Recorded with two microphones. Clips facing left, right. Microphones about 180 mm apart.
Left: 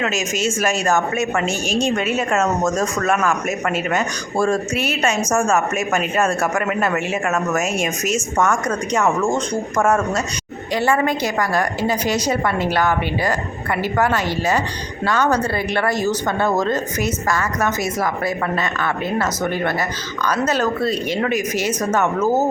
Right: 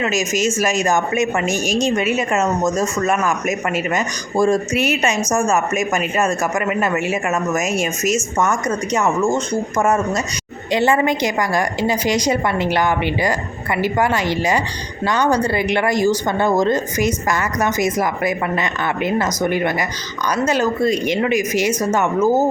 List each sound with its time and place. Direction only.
0.0 s speech: 5° right (ahead or behind)
10.7 s speech: 20° right (ahead or behind)